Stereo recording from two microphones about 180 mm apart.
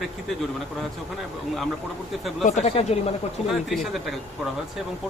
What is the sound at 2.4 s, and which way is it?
Speech, 40° left (ahead or behind).